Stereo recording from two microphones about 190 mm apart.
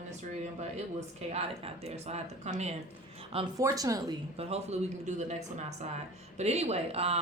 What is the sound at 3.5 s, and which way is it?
Speech, 20° right (ahead or behind).